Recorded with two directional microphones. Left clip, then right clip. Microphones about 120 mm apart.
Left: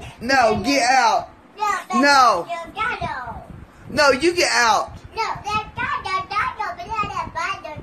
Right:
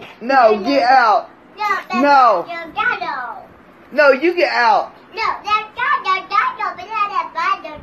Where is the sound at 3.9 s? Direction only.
65° left (ahead or behind).